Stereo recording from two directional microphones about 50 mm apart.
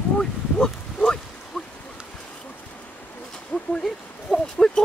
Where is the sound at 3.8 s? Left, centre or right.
Centre.